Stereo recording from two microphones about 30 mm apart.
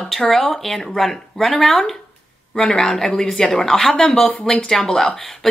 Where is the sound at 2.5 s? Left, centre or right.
Left.